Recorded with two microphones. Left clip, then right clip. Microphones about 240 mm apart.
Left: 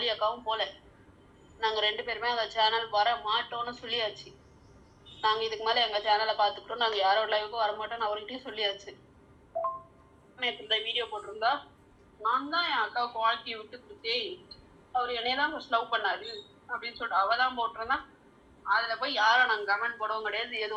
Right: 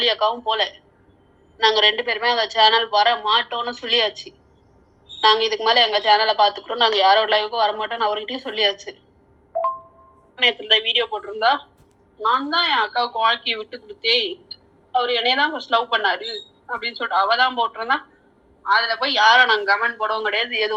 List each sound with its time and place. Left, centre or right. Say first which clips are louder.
0.0 s a woman's voice: right 10 dB; right
10.3 s a woman's voice: right 13 dB; right